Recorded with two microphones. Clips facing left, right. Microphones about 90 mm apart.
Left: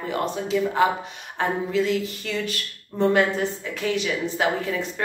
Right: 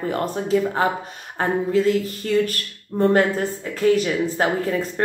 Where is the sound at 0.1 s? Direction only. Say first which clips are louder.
Right 2 dB; 40° right (ahead or behind).